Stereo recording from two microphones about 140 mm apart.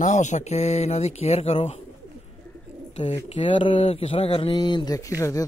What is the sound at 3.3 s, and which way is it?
Speech, 40° left (ahead or behind).